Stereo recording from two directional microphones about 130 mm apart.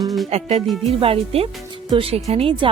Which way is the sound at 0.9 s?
45° right (ahead or behind).